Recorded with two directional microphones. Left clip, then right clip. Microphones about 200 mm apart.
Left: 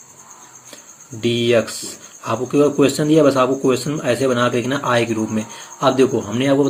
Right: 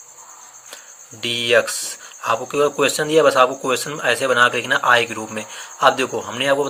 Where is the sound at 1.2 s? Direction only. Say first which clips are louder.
Even; 35° right (ahead or behind).